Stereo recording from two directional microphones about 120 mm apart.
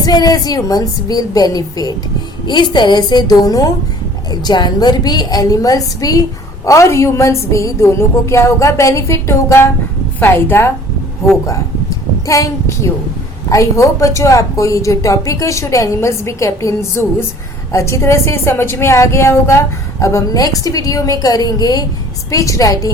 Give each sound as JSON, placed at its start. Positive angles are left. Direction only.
{"t": 0.0, "sound": "a woman's voice", "side_deg": 35}